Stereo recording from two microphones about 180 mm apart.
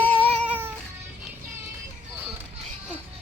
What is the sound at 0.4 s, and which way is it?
Cat, 10° right (ahead or behind).